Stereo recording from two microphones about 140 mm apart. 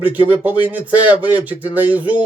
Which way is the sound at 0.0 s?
10° right (ahead or behind).